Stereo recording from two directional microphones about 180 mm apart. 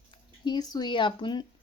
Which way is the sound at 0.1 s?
25° left (ahead or behind).